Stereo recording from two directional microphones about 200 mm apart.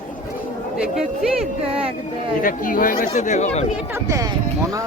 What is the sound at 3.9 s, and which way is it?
Speech, 15° right (ahead or behind).